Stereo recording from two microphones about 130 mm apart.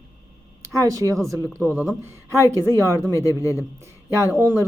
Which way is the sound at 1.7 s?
5° right (ahead or behind).